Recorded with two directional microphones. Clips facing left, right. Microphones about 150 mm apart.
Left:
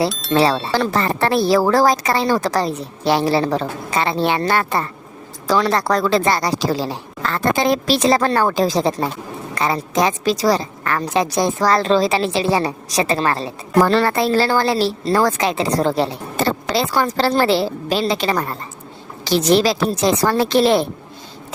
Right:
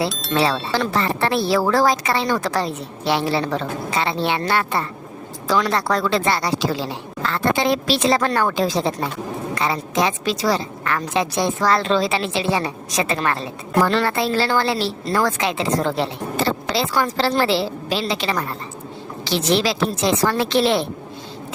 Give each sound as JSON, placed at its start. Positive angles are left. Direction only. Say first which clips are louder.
{"t": 0.3, "sound": "a woman's voice", "louder": "left 4 dB", "side_deg": 40}